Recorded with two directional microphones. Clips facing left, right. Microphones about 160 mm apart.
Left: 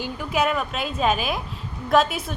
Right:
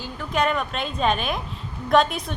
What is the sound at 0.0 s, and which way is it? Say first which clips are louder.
A woman's voice: left 1 dB; 10° left (ahead or behind).